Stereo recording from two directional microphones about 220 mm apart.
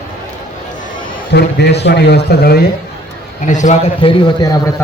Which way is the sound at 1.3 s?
50° left (ahead or behind).